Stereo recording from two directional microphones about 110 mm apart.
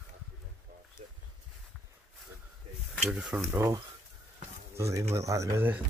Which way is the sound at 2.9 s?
5° right (ahead or behind).